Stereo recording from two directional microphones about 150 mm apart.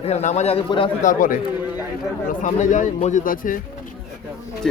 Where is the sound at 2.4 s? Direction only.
55° left (ahead or behind).